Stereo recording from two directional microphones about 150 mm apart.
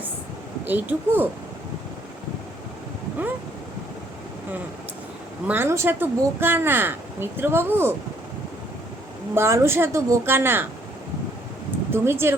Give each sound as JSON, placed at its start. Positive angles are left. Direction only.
{"t": 0.6, "sound": "speech", "side_deg": -10}
{"t": 5.5, "sound": "speech", "side_deg": -15}
{"t": 9.3, "sound": "speech", "side_deg": -15}
{"t": 11.9, "sound": "speech", "side_deg": -15}